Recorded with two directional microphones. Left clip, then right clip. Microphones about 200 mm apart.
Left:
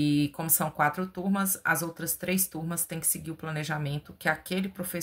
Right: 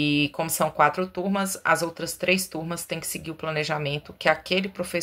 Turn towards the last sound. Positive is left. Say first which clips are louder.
# right 8 dB
turn(degrees=15)  # may be behind; listen again after turning